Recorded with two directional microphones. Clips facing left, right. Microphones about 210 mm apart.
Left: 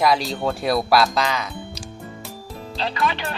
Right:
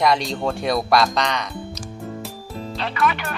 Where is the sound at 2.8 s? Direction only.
30° left (ahead or behind).